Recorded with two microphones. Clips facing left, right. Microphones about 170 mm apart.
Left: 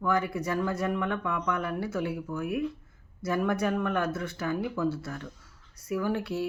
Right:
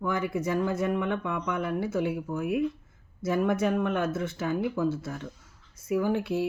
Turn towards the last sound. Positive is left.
turn(degrees=-20)  # may be behind; listen again after turning